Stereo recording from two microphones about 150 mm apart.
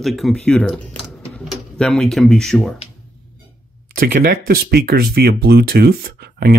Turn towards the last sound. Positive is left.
turn(degrees=-90)